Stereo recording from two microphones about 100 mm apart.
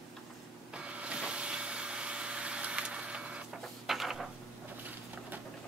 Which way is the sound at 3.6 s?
Centre (ahead or behind).